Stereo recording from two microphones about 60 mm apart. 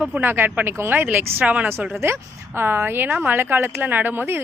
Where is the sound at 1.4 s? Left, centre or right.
Right.